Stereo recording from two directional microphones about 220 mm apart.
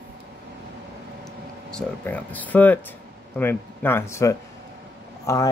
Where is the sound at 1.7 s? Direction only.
5° left (ahead or behind).